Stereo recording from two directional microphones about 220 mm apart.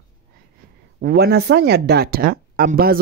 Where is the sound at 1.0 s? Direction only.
45° right (ahead or behind).